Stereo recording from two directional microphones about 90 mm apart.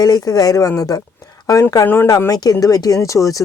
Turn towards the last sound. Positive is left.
turn(degrees=40)  # may be behind; listen again after turning